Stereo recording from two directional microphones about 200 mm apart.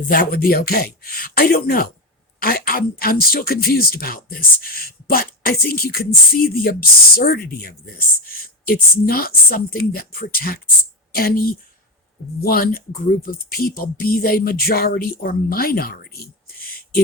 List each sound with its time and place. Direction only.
0.0 s speech: 45° left (ahead or behind)